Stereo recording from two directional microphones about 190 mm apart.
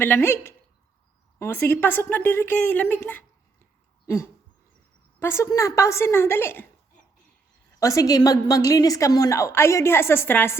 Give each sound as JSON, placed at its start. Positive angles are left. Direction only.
{"t": 0.0, "sound": "a woman's voice", "side_deg": 10}
{"t": 4.0, "sound": "a sound", "side_deg": 15}
{"t": 5.2, "sound": "a woman's voice", "side_deg": 15}
{"t": 7.8, "sound": "a woman's voice", "side_deg": 15}